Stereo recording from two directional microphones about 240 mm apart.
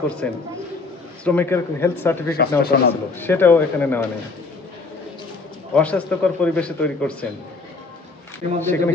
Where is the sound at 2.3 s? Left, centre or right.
Left.